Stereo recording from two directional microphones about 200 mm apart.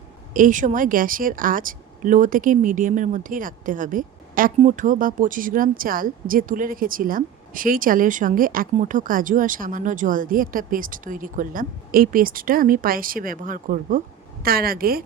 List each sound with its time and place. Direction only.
0.3 s speech: 40° right (ahead or behind)